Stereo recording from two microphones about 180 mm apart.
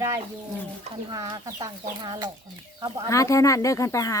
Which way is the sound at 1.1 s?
20° right (ahead or behind).